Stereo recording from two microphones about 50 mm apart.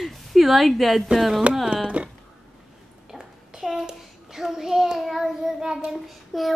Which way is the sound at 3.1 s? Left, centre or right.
Centre.